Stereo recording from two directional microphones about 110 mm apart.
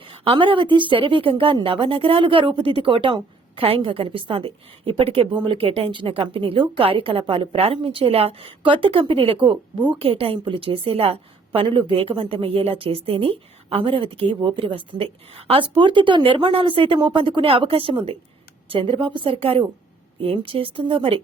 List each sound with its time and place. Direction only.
0.0 s a woman's voice: 55° right (ahead or behind)
11.6 s a woman's voice: 45° right (ahead or behind)